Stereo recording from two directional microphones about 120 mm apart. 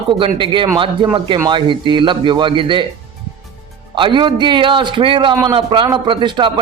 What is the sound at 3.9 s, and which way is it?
A man's voice, 40° right (ahead or behind).